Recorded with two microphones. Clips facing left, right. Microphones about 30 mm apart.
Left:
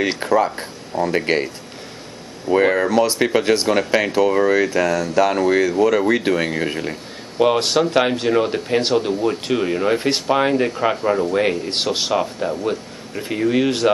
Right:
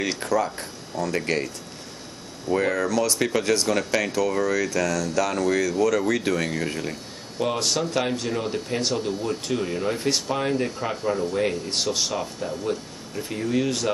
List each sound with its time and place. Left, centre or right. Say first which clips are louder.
0.0 s speech: left 6 dB; left
2.5 s speech: left 7 dB; left